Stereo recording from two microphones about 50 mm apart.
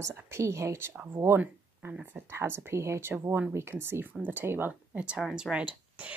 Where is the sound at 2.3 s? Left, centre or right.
Right.